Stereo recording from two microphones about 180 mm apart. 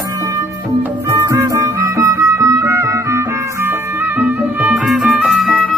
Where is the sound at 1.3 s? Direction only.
15° right (ahead or behind); by 5.8 s centre (ahead or behind).